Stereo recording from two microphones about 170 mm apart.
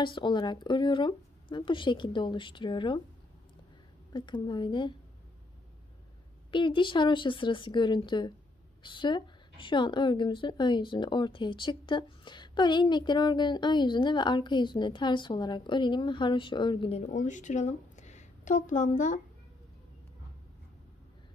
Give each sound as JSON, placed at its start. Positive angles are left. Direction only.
{"t": 0.0, "sound": "a woman's voice", "side_deg": 30}
{"t": 4.1, "sound": "a woman's voice", "side_deg": 25}
{"t": 6.5, "sound": "a woman's voice", "side_deg": 30}